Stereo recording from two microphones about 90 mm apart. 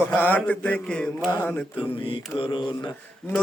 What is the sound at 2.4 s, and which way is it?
Speech, 60° left (ahead or behind).